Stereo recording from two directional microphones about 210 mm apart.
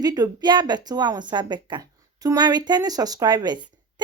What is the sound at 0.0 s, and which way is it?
Speech, 20° right (ahead or behind).